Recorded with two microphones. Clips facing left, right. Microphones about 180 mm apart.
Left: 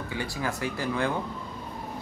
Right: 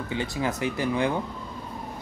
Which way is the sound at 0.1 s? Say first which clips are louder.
Right 4 dB; 20° right (ahead or behind).